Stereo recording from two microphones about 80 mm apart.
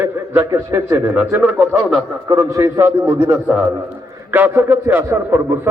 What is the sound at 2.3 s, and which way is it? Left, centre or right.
A man's voice, right.